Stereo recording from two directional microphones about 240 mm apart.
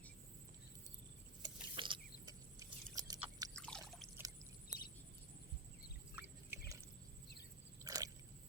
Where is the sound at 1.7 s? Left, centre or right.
Right.